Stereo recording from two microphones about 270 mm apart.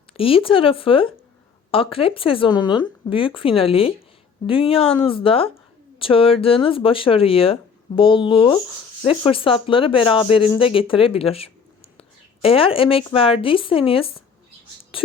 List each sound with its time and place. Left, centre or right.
0.1 s speech: left
11.9 s a sound: left
13.1 s speech: centre